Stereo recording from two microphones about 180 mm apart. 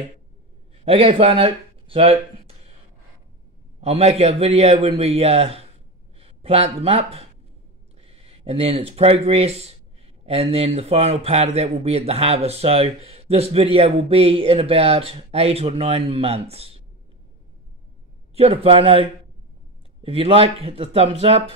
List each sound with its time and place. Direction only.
0.8 s speech: 30° right (ahead or behind)
3.8 s speech: 35° right (ahead or behind)
18.3 s speech: 30° right (ahead or behind)